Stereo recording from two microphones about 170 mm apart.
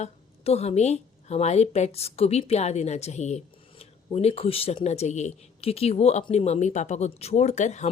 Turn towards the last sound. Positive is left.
turn(degrees=45)  # may be behind; listen again after turning